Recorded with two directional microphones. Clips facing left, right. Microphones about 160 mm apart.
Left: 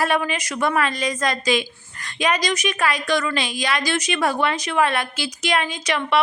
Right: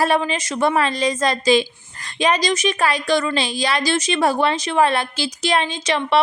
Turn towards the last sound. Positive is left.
turn(degrees=-30)  # may be behind; listen again after turning